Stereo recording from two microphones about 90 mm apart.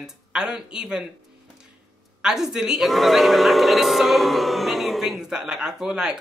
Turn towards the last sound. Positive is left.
turn(degrees=-10)  # may be behind; listen again after turning